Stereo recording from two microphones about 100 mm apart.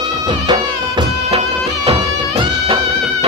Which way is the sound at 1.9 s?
60° right (ahead or behind).